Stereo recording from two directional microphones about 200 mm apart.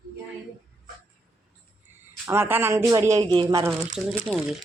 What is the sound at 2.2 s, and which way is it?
Speech, 10° right (ahead or behind).